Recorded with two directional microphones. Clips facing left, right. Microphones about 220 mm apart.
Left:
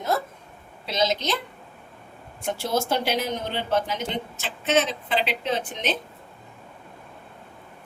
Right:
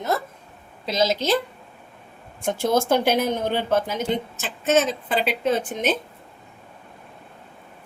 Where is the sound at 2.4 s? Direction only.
50° right (ahead or behind).